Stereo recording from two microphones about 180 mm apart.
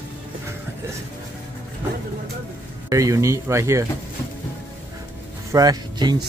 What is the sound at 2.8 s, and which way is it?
Speech, 20° right (ahead or behind).